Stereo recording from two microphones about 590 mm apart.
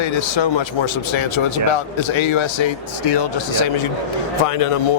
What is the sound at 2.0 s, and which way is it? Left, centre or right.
Speech, left.